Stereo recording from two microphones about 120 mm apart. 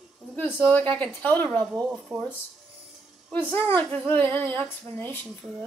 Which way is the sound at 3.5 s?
15° left (ahead or behind).